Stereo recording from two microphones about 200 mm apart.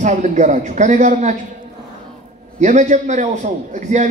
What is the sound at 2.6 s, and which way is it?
A man's voice, 35° right (ahead or behind).